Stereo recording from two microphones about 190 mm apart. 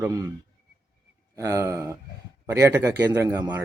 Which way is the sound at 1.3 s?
15° right (ahead or behind).